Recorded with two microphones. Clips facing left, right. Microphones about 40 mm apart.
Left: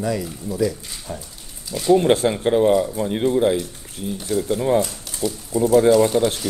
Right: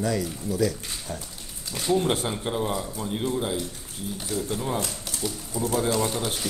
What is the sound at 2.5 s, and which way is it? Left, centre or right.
Speech, left.